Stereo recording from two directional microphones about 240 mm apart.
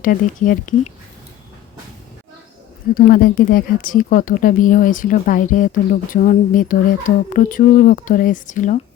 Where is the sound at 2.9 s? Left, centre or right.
Left.